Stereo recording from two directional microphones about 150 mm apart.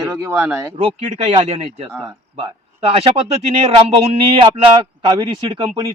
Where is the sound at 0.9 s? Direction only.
45° right (ahead or behind).